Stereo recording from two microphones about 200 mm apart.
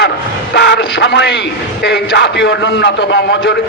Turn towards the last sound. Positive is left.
turn(degrees=60)  # may be behind; listen again after turning